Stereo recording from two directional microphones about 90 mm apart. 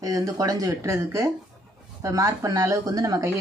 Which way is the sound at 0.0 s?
40° right (ahead or behind).